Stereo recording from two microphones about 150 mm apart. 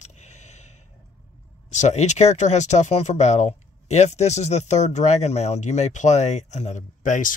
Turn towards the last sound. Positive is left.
turn(degrees=55)  # may be behind; listen again after turning